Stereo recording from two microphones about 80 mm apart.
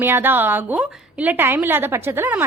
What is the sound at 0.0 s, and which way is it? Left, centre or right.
A woman's voice, right.